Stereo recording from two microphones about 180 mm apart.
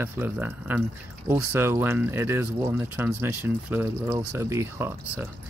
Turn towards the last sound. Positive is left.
turn(degrees=-15)  # may be behind; listen again after turning